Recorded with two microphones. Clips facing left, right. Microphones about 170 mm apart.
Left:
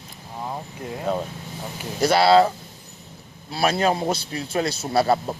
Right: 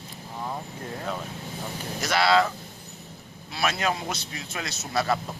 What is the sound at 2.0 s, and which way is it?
Speech, 30° left (ahead or behind).